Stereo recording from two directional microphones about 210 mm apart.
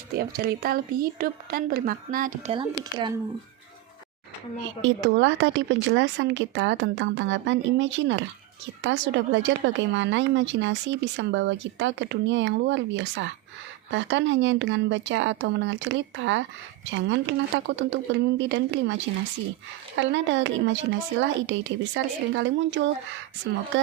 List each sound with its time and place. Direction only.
0.2 s a woman's voice: 45° right (ahead or behind)
2.5 s a woman's voice: 20° right (ahead or behind)
4.8 s a woman's voice: 60° right (ahead or behind)
20.0 s a woman's voice: 60° right (ahead or behind)